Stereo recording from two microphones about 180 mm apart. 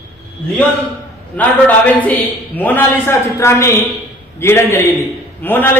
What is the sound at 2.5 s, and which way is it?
A woman's voice, 10° left (ahead or behind).